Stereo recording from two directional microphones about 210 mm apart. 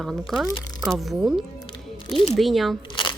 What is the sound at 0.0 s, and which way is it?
A woman's voice, centre (ahead or behind).